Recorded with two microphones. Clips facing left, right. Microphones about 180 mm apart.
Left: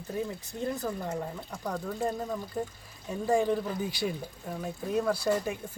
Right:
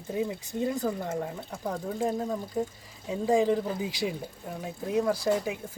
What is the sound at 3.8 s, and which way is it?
Speech, 90° right.